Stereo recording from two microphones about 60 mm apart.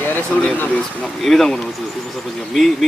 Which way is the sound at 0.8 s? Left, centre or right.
Centre.